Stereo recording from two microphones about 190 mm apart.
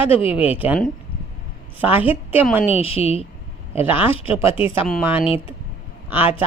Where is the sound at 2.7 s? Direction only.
30° left (ahead or behind).